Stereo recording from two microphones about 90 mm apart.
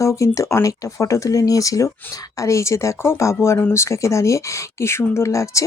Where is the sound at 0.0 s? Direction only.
35° left (ahead or behind).